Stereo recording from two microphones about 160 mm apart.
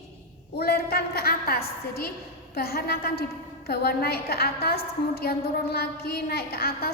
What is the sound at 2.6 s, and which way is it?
A woman's voice, 75° left (ahead or behind).